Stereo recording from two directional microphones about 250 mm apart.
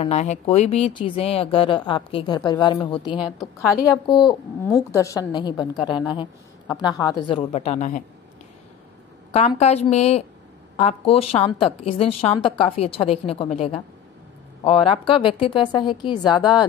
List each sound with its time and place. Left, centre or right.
0.0 s a woman's voice: left
9.3 s speech: left